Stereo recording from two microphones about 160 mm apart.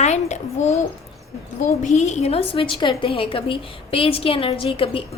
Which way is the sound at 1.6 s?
50° left (ahead or behind).